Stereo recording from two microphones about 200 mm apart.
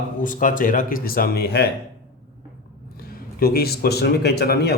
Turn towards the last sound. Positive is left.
turn(degrees=55)  # may be behind; listen again after turning